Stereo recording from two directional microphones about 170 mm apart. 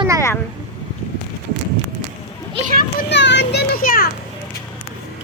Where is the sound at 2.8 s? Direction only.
75° left (ahead or behind); by 4.1 s 60° left (ahead or behind).